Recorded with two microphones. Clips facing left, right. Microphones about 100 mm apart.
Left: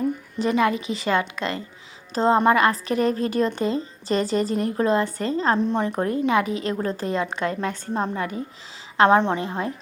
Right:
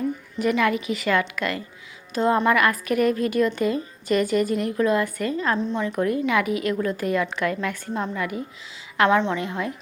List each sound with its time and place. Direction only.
0.3 s a woman's voice: 25° left (ahead or behind)
5.5 s a woman's voice: 50° left (ahead or behind)
5.9 s a woman's voice: 30° left (ahead or behind)
9.0 s a woman's voice: 45° left (ahead or behind)
9.4 s speech: 35° left (ahead or behind)